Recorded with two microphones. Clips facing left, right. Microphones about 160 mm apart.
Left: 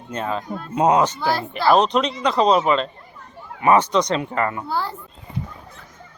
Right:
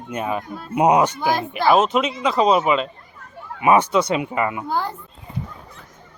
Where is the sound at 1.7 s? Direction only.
5° right (ahead or behind).